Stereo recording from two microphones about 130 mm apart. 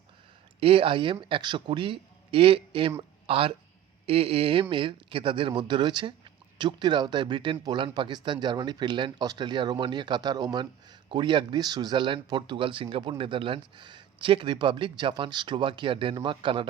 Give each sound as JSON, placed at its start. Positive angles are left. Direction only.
{"t": 0.6, "sound": "speech", "side_deg": -45}